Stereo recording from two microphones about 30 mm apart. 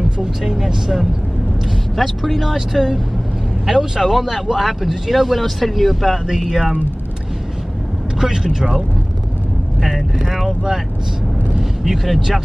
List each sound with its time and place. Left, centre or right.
0.2 s speech: centre
2.0 s speech: centre
2.5 s speech: centre
6.5 s speech: centre
9.8 s speech: centre
11.8 s speech: centre